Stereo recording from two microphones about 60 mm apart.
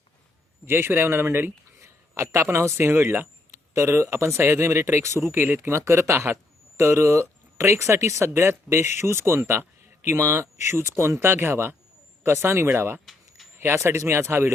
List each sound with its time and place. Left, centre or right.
0.6 s speech: right
1.8 s speech: right
13.1 s a sound: centre
13.6 s speech: right